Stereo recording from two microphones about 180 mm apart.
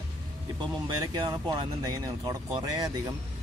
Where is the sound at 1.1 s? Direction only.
25° right (ahead or behind).